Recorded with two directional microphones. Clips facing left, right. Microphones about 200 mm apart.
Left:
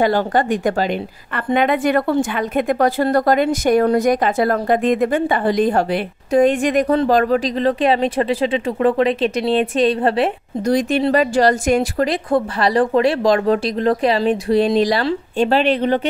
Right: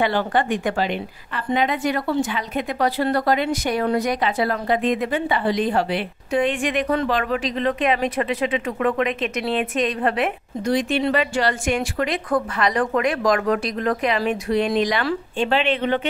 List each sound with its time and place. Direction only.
0.0 s a woman's voice: 40° left (ahead or behind)
1.3 s a woman's voice: 55° left (ahead or behind); by 16.1 s 40° left (ahead or behind)